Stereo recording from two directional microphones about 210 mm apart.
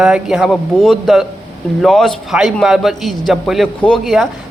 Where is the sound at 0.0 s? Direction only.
5° right (ahead or behind).